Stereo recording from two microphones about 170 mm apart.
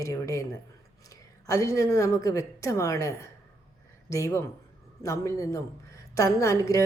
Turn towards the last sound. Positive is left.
turn(degrees=20)  # may be behind; listen again after turning